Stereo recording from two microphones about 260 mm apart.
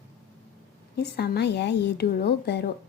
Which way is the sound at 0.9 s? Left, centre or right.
Left.